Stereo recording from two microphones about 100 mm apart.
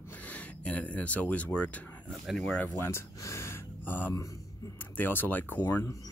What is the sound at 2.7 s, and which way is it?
Speech, 25° left (ahead or behind).